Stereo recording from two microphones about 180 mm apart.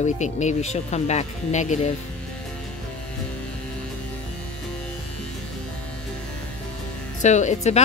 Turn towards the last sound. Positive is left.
turn(degrees=40)  # may be behind; listen again after turning